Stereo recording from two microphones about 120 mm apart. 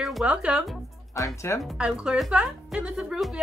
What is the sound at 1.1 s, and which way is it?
Speech, 25° left (ahead or behind).